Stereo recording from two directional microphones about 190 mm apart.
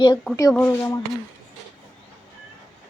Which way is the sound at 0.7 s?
15° left (ahead or behind).